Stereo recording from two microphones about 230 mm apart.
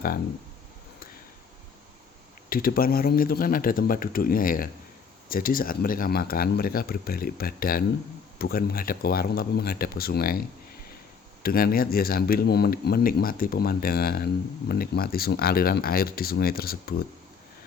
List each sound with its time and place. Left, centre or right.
2.5 s a man's voice: left
11.4 s a man's voice: left